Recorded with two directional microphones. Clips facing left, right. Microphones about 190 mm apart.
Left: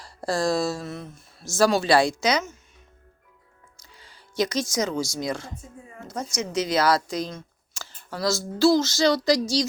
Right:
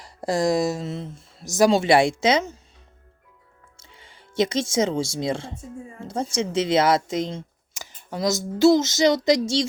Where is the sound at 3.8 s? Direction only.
25° right (ahead or behind).